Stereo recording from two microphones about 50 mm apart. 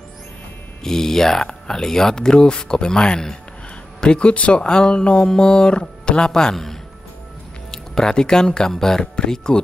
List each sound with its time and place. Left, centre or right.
0.8 s speech: centre